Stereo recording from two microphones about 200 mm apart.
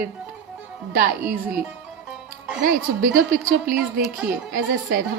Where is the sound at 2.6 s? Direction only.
45° right (ahead or behind).